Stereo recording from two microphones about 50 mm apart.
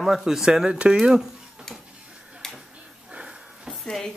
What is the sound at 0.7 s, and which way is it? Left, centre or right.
Speech, centre.